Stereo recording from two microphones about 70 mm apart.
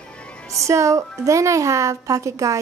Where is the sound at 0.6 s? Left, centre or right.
Right.